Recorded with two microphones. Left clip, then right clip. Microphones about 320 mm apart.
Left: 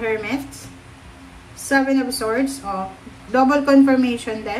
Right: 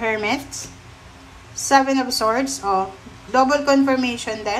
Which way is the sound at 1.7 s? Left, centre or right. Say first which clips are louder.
Right 2 dB; centre.